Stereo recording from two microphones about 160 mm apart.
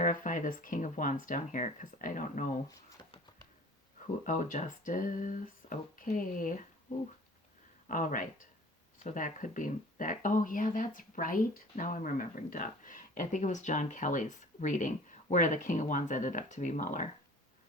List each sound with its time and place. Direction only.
0.0 s speech: 55° left (ahead or behind)
4.0 s speech: 50° left (ahead or behind)
7.9 s speech: 55° left (ahead or behind)